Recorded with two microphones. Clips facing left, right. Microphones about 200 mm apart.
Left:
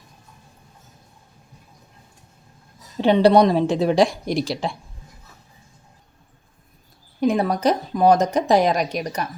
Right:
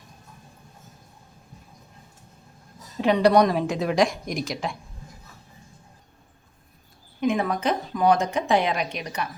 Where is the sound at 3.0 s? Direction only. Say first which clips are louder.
Left 4 dB; 30° left (ahead or behind).